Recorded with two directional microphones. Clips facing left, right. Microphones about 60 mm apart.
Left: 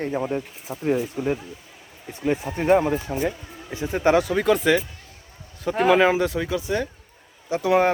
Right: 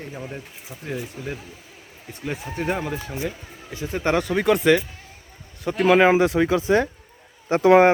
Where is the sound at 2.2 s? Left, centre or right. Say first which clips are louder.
Left 5 dB; centre.